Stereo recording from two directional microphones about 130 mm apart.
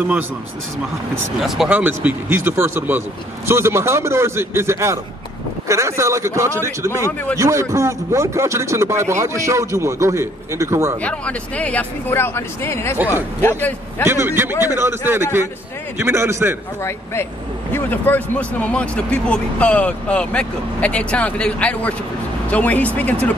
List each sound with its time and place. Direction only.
1.4 s speech: centre (ahead or behind)
1.7 s a man's voice: 15° right (ahead or behind)
11.0 s speech: 10° left (ahead or behind)
14.0 s a man's voice: 20° right (ahead or behind)
16.8 s speech: 20° left (ahead or behind)